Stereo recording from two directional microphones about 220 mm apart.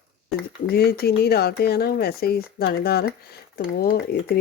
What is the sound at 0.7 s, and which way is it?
Speech, 45° left (ahead or behind).